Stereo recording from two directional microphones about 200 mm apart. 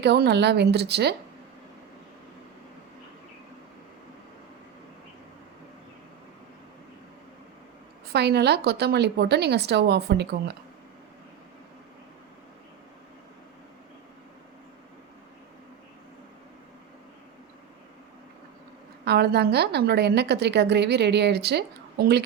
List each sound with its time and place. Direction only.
0.0 s a woman's voice: 55° right (ahead or behind)
8.1 s a woman's voice: 55° right (ahead or behind)
19.0 s a woman's voice: 55° right (ahead or behind)